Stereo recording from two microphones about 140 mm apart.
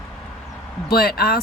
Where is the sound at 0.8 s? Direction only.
90° left.